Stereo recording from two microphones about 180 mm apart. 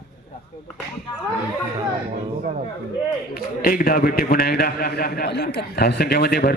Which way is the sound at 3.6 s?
50° left (ahead or behind).